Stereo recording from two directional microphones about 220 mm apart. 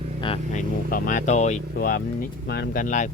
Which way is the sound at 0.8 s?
40° left (ahead or behind).